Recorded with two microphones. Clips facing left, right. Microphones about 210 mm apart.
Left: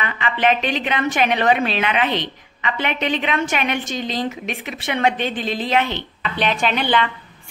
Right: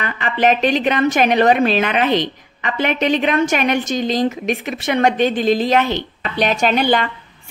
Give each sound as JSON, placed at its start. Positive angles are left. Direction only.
{"t": 0.0, "sound": "a woman's voice", "side_deg": -40}